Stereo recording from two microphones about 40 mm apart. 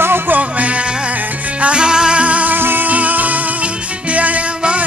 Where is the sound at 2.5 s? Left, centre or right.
Right.